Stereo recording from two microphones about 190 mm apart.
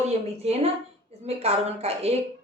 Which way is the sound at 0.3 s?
35° right (ahead or behind).